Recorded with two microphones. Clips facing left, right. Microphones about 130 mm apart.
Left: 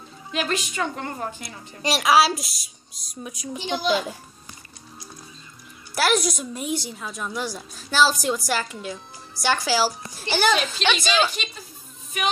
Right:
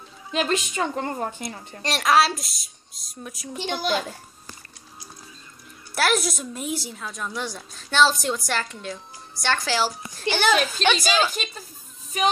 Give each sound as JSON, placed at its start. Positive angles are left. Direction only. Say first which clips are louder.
{"t": 0.3, "sound": "a woman's voice", "louder": "right 2 dB", "side_deg": -30}
{"t": 1.8, "sound": "a woman's voice", "louder": "left 1 dB", "side_deg": 5}
{"t": 5.9, "sound": "a woman's voice", "louder": "left 1 dB", "side_deg": 0}
{"t": 10.5, "sound": "a woman's voice", "louder": "right 2 dB", "side_deg": -10}
{"t": 12.1, "sound": "music", "louder": "right 3 dB", "side_deg": -35}